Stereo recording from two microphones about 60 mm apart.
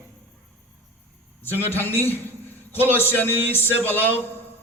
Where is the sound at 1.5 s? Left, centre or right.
Left.